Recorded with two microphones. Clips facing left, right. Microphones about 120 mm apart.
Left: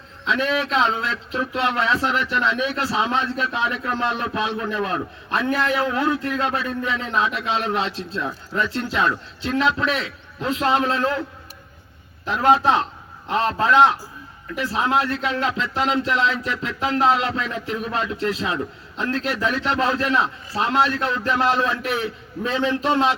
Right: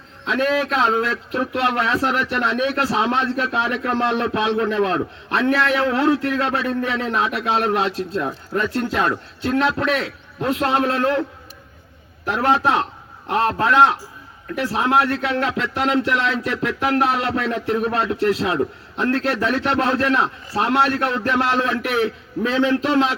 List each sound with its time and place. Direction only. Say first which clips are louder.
0.3 s a man's voice: right 2 dB; 55° right (ahead or behind)
12.2 s a man's voice: left 1 dB; 65° right (ahead or behind)